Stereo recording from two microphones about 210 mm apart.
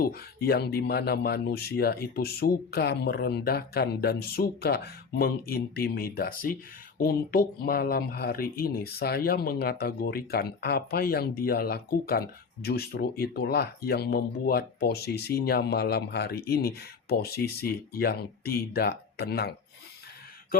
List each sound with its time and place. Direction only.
0.0 s speech: 45° left (ahead or behind)